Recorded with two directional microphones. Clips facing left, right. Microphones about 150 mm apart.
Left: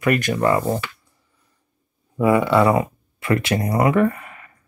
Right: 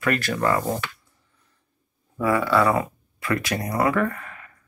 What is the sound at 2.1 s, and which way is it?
Speech, 20° left (ahead or behind).